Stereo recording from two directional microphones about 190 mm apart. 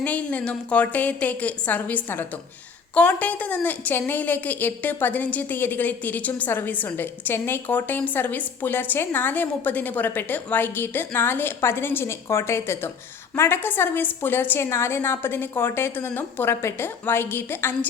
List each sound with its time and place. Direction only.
0.0 s a woman's voice: 5° left (ahead or behind)